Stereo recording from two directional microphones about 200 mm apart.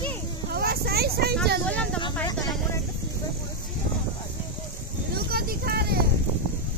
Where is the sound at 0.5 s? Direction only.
50° right (ahead or behind).